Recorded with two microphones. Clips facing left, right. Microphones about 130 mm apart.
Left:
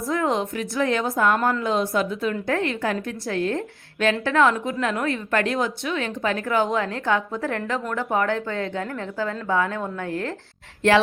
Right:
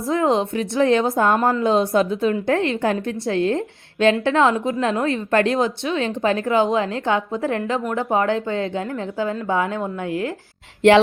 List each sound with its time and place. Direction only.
0.0 s a woman's voice: 25° right (ahead or behind)